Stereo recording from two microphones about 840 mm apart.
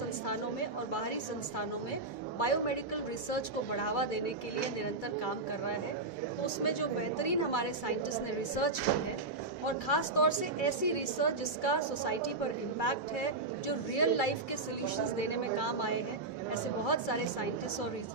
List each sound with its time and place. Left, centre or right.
0.9 s a woman's voice: left